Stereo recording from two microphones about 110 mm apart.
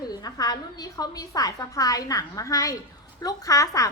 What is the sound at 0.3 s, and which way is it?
Speech, 35° left (ahead or behind).